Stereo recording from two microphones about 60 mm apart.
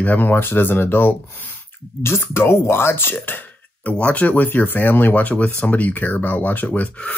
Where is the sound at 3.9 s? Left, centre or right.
Left.